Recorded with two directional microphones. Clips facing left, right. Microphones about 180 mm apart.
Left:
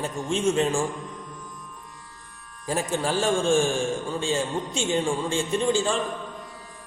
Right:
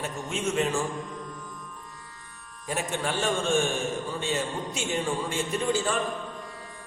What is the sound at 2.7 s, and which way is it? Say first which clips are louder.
A man's voice: left 4 dB; 35° left (ahead or behind).